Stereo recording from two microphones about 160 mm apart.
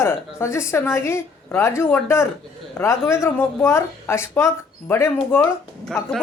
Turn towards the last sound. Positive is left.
turn(degrees=5)  # may be behind; listen again after turning